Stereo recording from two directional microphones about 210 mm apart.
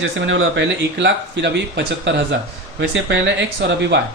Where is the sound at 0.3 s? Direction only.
60° right (ahead or behind).